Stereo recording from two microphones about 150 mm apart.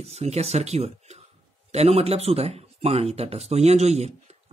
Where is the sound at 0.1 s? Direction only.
45° right (ahead or behind).